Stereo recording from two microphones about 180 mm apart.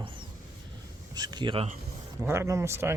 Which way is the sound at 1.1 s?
20° right (ahead or behind).